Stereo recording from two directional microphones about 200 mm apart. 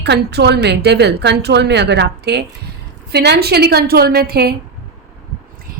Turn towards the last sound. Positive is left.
turn(degrees=-50)  # may be behind; listen again after turning